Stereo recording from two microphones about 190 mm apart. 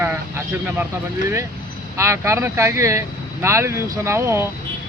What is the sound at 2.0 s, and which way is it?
Speech, 15° right (ahead or behind).